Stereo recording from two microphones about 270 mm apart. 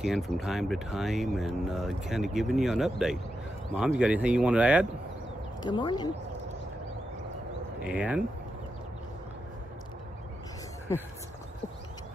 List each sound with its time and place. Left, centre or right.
0.0 s speech: centre
5.6 s speech: centre
7.8 s speech: centre